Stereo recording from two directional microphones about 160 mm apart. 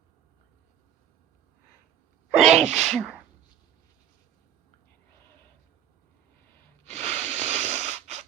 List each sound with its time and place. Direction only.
2.4 s sneeze: centre (ahead or behind)
2.7 s speech: 5° left (ahead or behind)
6.9 s wheeze: 45° right (ahead or behind)